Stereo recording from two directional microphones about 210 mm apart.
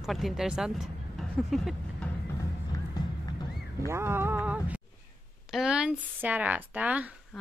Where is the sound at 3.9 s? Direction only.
10° right (ahead or behind).